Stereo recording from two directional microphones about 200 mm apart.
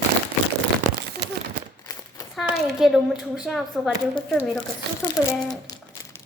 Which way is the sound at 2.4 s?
Centre (ahead or behind).